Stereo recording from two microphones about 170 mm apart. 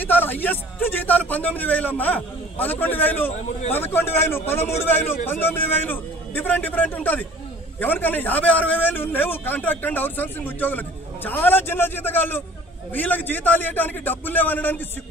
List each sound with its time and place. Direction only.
0.0 s a man's voice: 10° left (ahead or behind)
3.3 s a man's voice: 35° left (ahead or behind)
3.7 s a man's voice: 15° left (ahead or behind)